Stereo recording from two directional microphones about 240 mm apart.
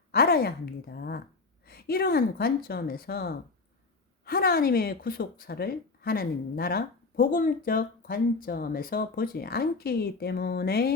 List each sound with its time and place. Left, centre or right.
0.1 s speech: left